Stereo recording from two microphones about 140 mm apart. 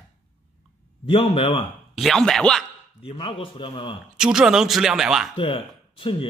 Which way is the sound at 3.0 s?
40° left (ahead or behind).